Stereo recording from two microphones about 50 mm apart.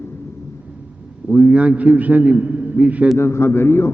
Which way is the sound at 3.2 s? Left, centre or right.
Left.